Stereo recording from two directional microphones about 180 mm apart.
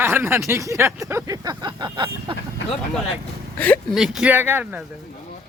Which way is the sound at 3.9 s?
5° right (ahead or behind).